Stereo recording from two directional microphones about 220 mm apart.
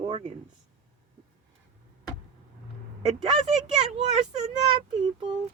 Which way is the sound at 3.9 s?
30° right (ahead or behind).